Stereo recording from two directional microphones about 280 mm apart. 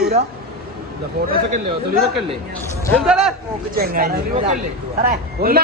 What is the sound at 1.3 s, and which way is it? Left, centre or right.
Speech, right.